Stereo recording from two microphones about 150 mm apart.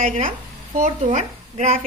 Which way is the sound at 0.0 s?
50° right (ahead or behind).